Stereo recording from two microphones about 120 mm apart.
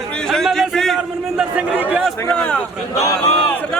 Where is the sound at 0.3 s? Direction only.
5° left (ahead or behind).